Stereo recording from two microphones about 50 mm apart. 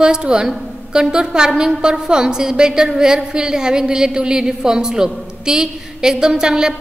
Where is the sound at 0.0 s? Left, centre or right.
Centre.